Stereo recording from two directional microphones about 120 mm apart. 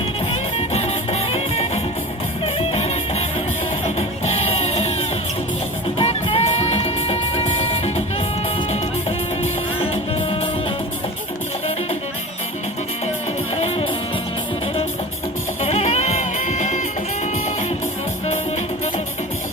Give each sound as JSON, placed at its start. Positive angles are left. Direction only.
{"t": 0.3, "sound": "music", "side_deg": 60}
{"t": 6.0, "sound": "music", "side_deg": 50}
{"t": 13.6, "sound": "music", "side_deg": 60}
{"t": 15.6, "sound": "music", "side_deg": 60}